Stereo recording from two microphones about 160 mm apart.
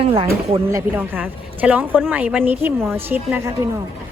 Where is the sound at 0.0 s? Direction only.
30° right (ahead or behind).